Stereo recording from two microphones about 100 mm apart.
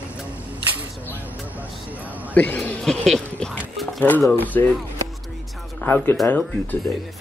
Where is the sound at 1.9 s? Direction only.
15° right (ahead or behind).